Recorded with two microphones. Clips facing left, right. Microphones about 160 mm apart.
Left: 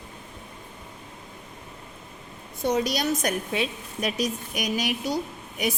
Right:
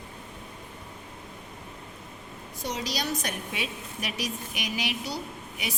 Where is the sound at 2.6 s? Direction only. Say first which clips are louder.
Left 8 dB; 55° left (ahead or behind).